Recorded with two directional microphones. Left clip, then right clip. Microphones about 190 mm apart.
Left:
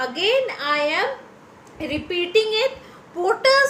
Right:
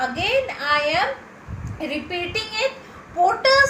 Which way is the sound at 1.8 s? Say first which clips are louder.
Left 2 dB; 60° left (ahead or behind).